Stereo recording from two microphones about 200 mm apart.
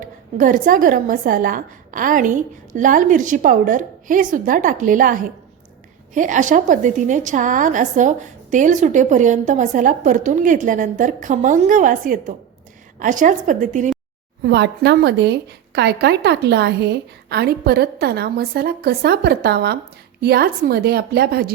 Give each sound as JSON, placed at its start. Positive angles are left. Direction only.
{"t": 0.3, "sound": "a woman's voice", "side_deg": -40}
{"t": 14.4, "sound": "a woman's voice", "side_deg": -60}